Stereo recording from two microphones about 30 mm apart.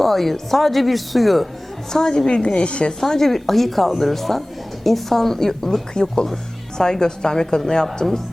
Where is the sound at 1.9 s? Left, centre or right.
Left.